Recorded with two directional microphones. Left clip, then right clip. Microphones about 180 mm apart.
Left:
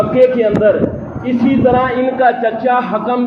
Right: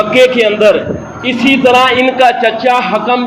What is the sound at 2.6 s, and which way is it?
Speech, 25° right (ahead or behind).